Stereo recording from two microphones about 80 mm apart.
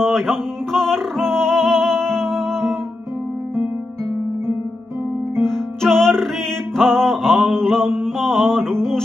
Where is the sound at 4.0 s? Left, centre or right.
Right.